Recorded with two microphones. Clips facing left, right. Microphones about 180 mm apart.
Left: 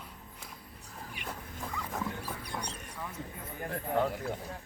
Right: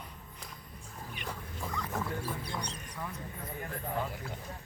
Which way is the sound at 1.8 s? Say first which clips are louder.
Right 1 dB; 10° left (ahead or behind).